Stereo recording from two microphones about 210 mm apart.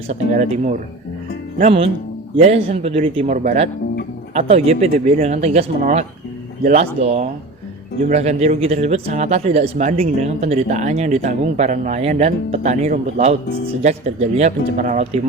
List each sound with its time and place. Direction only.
0.1 s a man's voice: 30° right (ahead or behind)